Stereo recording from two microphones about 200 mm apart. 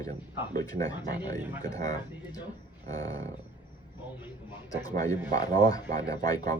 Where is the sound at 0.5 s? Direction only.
20° left (ahead or behind).